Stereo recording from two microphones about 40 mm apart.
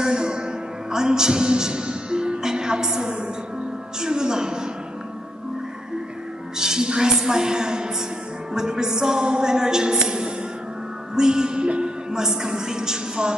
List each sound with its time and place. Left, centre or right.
0.0 s music: right
6.6 s music: centre
8.5 s a woman's voice: centre